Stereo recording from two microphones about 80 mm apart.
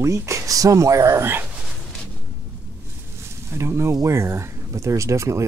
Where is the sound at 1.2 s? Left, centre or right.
Right.